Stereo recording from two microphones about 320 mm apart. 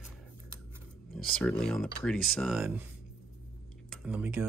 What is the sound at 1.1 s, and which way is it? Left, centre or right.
Speech, centre.